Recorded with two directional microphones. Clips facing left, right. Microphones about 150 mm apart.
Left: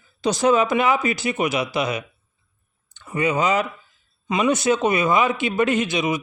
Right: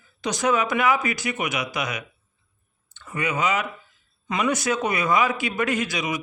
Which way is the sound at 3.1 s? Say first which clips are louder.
Left 4 dB; 30° left (ahead or behind).